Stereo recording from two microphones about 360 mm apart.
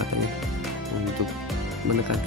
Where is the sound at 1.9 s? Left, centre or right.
Right.